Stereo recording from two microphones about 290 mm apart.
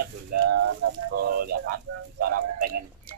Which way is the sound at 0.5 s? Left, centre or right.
Right.